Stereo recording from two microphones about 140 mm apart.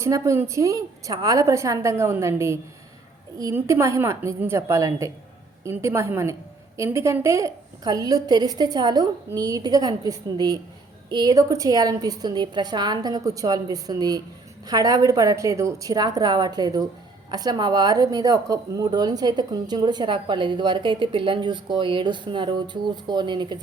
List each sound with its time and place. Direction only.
0.0 s a woman's voice: 20° right (ahead or behind)